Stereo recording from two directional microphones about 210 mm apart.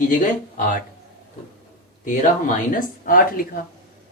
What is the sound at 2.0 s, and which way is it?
Speech, 40° left (ahead or behind).